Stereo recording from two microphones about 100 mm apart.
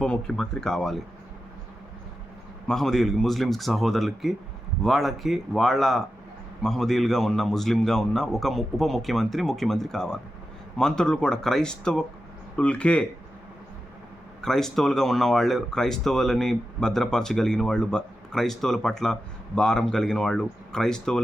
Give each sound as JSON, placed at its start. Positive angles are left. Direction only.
{"t": 0.0, "sound": "speech", "side_deg": 5}
{"t": 2.6, "sound": "speech", "side_deg": 5}
{"t": 14.4, "sound": "speech", "side_deg": 5}